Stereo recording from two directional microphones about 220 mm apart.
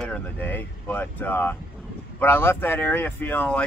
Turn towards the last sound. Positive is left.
turn(degrees=5)  # may be behind; listen again after turning